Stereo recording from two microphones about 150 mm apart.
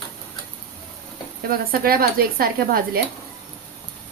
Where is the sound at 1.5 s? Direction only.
80° right.